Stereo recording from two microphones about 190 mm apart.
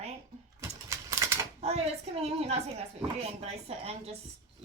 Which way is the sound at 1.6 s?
35° right (ahead or behind).